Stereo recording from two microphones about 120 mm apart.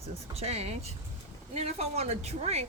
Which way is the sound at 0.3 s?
60° right (ahead or behind).